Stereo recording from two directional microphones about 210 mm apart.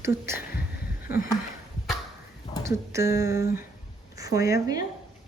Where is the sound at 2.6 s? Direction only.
15° right (ahead or behind).